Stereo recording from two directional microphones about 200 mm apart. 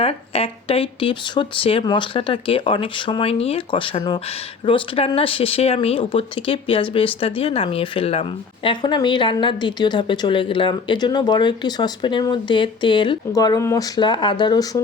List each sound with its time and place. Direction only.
0.0 s speech: 30° left (ahead or behind)